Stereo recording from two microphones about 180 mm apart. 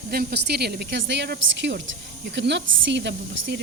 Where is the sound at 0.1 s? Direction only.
60° right (ahead or behind).